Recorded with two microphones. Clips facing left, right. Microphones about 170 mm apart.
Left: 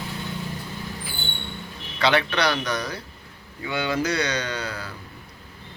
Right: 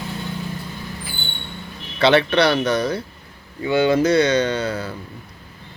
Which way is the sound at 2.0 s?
25° right (ahead or behind).